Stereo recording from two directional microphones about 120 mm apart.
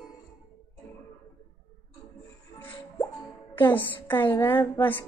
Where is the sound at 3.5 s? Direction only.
15° left (ahead or behind).